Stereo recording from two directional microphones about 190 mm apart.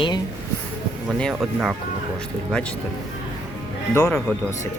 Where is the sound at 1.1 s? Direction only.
5° left (ahead or behind).